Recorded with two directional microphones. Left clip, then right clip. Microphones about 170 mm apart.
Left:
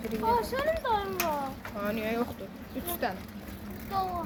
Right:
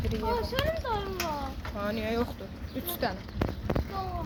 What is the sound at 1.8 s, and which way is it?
Speech, 40° right (ahead or behind).